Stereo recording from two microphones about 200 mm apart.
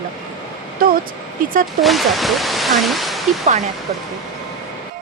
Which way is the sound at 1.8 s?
Centre (ahead or behind).